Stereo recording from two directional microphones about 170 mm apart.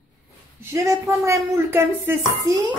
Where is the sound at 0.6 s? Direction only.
15° right (ahead or behind).